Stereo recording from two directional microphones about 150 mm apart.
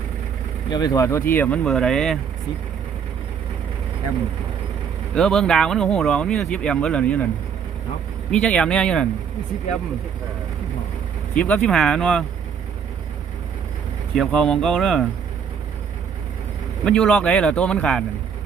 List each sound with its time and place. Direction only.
0.7 s speech: 25° left (ahead or behind); by 2.1 s 5° left (ahead or behind)
5.1 s speech: 5° left (ahead or behind)
8.3 s speech: 5° left (ahead or behind)
11.3 s speech: 10° left (ahead or behind)
14.2 s speech: 5° left (ahead or behind)
16.8 s speech: 5° left (ahead or behind)